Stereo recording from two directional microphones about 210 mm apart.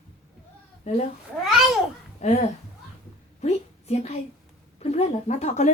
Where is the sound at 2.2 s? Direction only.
30° left (ahead or behind).